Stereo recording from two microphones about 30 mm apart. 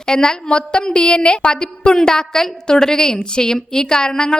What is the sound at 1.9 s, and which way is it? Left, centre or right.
Speech, left.